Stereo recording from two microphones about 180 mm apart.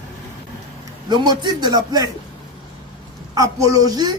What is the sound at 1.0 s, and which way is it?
Speech, 25° right (ahead or behind).